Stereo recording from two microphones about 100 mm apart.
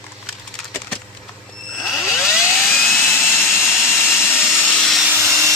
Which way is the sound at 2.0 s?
30° left (ahead or behind).